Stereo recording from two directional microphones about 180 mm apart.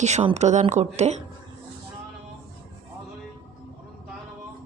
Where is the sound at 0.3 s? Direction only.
40° right (ahead or behind).